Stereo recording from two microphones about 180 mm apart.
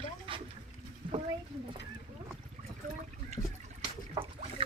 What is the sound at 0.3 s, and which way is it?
Boat, 30° right (ahead or behind).